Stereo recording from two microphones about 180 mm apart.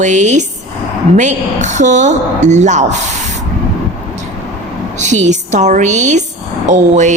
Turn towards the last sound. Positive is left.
turn(degrees=-40)  # may be behind; listen again after turning